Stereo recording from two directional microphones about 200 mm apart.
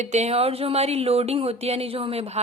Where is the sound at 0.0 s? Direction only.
35° right (ahead or behind).